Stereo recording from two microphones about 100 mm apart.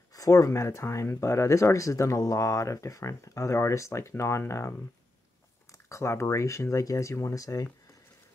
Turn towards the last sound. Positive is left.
turn(degrees=35)  # may be behind; listen again after turning